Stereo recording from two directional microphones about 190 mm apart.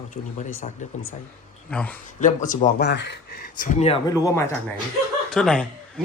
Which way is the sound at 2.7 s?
65° left (ahead or behind).